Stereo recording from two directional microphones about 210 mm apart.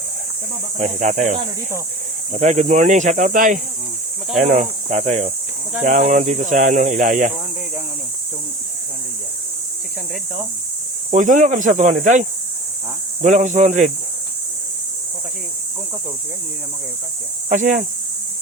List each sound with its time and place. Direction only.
0.8 s speech: 35° right (ahead or behind)
11.1 s speech: 35° right (ahead or behind)
13.2 s speech: 35° right (ahead or behind)
17.5 s speech: 35° right (ahead or behind)